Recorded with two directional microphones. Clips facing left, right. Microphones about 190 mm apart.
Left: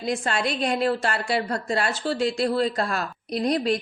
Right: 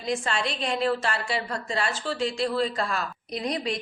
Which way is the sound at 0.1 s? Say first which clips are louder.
Left 2 dB; 40° left (ahead or behind).